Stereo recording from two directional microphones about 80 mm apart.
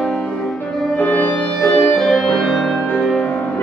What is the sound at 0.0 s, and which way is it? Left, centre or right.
Music, centre.